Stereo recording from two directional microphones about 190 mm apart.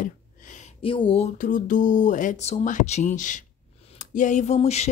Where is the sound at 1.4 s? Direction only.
45° left (ahead or behind).